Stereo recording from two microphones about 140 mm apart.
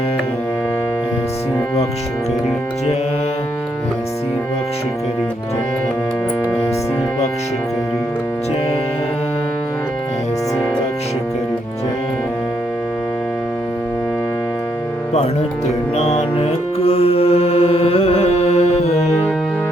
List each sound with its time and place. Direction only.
15.6 s music: 50° left (ahead or behind)